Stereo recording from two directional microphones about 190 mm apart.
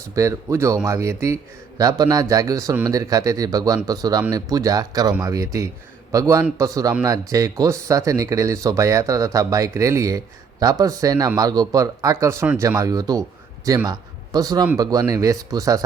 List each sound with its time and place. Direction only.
0.1 s a man's voice: 15° right (ahead or behind)